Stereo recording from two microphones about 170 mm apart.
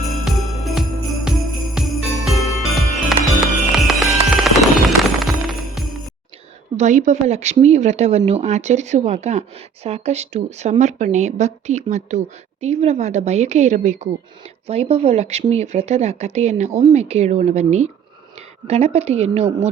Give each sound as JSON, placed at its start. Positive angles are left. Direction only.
{"t": 0.1, "sound": "jingle bell", "side_deg": 0}
{"t": 2.6, "sound": "music", "side_deg": 0}
{"t": 6.7, "sound": "speech", "side_deg": -45}